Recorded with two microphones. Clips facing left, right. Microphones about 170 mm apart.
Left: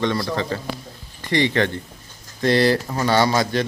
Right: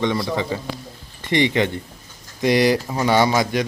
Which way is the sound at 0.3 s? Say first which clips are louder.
Right 1 dB; 15° right (ahead or behind).